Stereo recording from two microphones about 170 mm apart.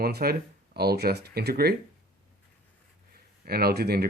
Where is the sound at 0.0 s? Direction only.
65° right (ahead or behind).